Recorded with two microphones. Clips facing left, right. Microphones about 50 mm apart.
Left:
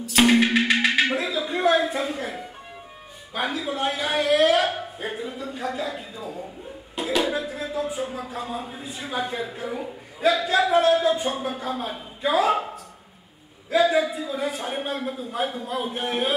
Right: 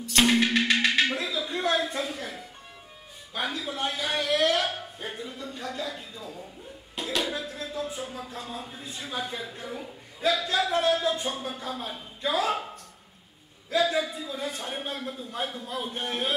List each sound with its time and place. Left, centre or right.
0.0 s music: centre
2.1 s speech: centre
3.3 s speech: centre
13.7 s speech: centre